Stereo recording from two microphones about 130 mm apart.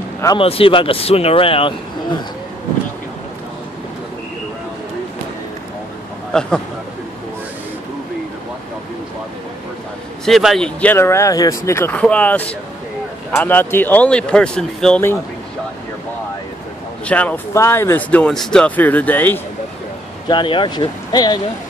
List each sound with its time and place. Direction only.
0.4 s speech: 45° left (ahead or behind)
6.3 s speech: 5° left (ahead or behind)
10.2 s speech: centre (ahead or behind); by 12.0 s 20° left (ahead or behind)
12.0 s speech: 10° left (ahead or behind)
17.0 s speech: 10° left (ahead or behind)
20.2 s speech: 40° left (ahead or behind)